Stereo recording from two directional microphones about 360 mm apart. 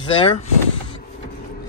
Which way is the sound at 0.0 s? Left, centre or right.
Centre.